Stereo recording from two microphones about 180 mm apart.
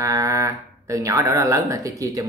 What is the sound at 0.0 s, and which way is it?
Speech, 20° right (ahead or behind).